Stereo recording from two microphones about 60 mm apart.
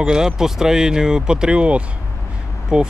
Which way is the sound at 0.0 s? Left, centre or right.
Centre.